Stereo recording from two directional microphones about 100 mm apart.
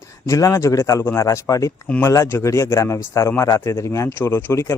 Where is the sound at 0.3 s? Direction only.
35° left (ahead or behind).